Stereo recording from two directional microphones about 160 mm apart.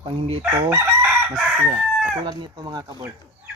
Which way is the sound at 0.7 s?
15° right (ahead or behind).